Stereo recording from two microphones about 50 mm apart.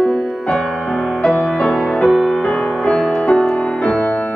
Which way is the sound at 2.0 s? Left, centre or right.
Centre.